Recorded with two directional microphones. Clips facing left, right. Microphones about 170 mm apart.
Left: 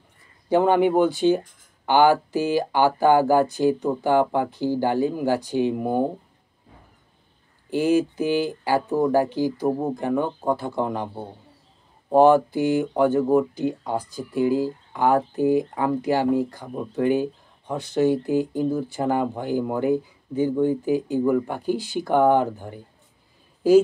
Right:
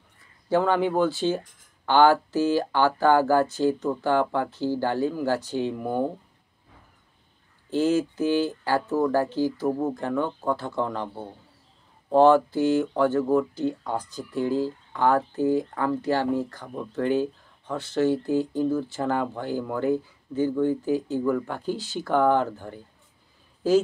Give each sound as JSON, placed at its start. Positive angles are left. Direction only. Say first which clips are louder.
{"t": 0.5, "sound": "speech", "louder": "left 4 dB", "side_deg": 15}
{"t": 7.7, "sound": "speech", "louder": "left 2 dB", "side_deg": 15}